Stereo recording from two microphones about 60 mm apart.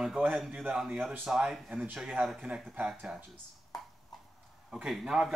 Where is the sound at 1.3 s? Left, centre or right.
Centre.